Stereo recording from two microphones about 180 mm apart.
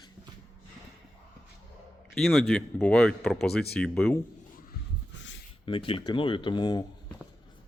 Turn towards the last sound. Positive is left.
turn(degrees=25)  # may be behind; listen again after turning